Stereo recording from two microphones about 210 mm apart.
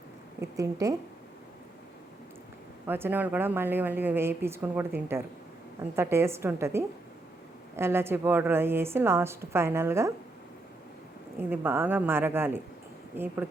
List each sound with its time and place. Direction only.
0.5 s a woman's voice: 15° right (ahead or behind)
2.8 s a woman's voice: 10° right (ahead or behind)
11.3 s a woman's voice: 10° right (ahead or behind)